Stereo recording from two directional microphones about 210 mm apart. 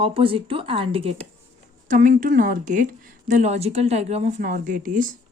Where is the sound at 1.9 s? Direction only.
40° right (ahead or behind).